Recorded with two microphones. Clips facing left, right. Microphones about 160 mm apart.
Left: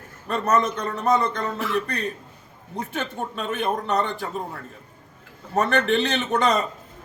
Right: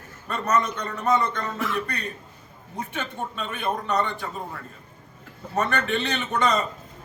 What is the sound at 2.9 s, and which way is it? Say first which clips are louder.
Speech: left 3 dB; 45° left (ahead or behind).